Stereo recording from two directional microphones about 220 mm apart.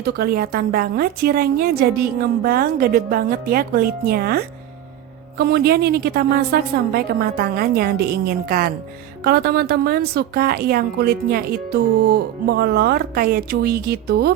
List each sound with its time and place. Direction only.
0.0 s a woman's voice: 45° right (ahead or behind)